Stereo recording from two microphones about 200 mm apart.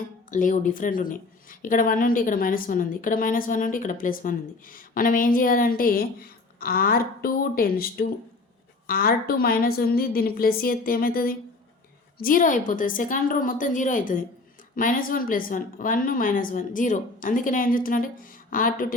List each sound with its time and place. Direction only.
0.3 s a woman's voice: 40° left (ahead or behind)